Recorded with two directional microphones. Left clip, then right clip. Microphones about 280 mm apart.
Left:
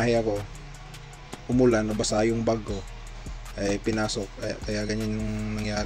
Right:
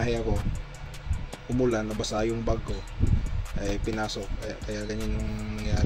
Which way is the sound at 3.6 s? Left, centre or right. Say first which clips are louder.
Left 4 dB; left.